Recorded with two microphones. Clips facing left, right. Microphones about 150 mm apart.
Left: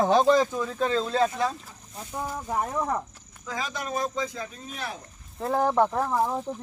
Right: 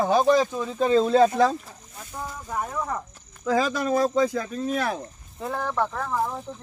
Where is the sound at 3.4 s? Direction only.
65° right (ahead or behind).